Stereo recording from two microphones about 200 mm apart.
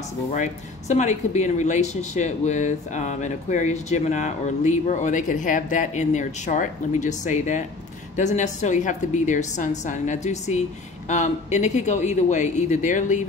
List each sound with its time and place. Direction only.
0.3 s speech: 40° left (ahead or behind)